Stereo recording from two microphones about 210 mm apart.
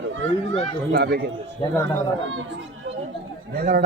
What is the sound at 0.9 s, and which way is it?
Speech, 50° right (ahead or behind).